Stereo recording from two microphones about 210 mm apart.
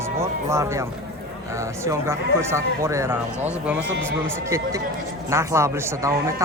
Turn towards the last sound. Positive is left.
turn(degrees=-15)  # may be behind; listen again after turning